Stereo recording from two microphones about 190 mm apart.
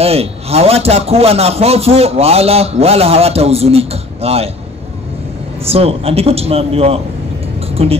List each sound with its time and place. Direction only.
0.0 s speech: 30° right (ahead or behind)
5.6 s speech: 30° right (ahead or behind)